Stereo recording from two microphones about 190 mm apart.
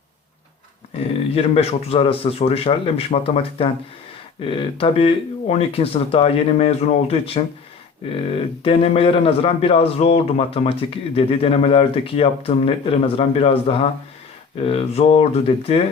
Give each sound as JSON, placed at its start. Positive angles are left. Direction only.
{"t": 1.4, "sound": "speech", "side_deg": 30}